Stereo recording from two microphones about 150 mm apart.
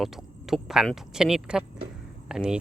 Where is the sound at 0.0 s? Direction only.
Centre (ahead or behind).